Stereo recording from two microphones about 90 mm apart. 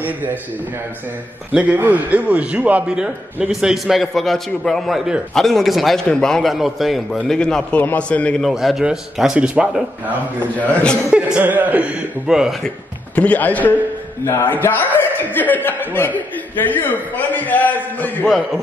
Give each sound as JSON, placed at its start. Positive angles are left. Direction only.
{"t": 0.0, "sound": "a man's voice", "side_deg": -20}
{"t": 1.5, "sound": "a man's voice", "side_deg": -15}
{"t": 7.2, "sound": "a man's voice", "side_deg": 10}
{"t": 8.4, "sound": "a man's voice", "side_deg": 0}
{"t": 10.6, "sound": "a man's voice", "side_deg": 15}
{"t": 11.1, "sound": "a man's voice", "side_deg": -10}
{"t": 12.6, "sound": "a man's voice", "side_deg": 15}